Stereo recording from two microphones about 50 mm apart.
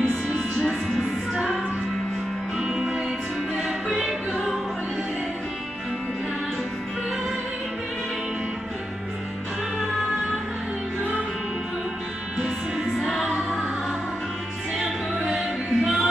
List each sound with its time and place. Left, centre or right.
0.0 s music: centre
0.6 s music: centre
2.6 s music: centre
12.4 s music: centre
12.9 s music: centre
15.2 s music: centre